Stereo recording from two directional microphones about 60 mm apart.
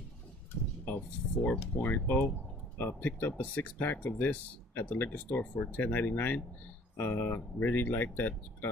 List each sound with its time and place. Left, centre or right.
1.4 s speech: left
7.0 s speech: left